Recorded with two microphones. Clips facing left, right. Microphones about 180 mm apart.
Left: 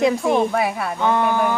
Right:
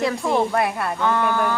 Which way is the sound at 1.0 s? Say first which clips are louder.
Left 3 dB; 20° left (ahead or behind).